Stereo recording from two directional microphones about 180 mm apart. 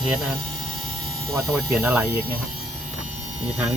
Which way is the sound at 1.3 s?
15° right (ahead or behind).